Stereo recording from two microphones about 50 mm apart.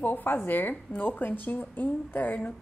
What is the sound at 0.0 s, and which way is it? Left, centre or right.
A woman's voice, left.